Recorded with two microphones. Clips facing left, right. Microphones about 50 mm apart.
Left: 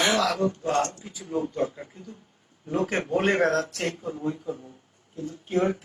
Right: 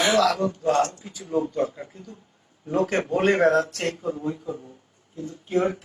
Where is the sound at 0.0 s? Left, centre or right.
Centre.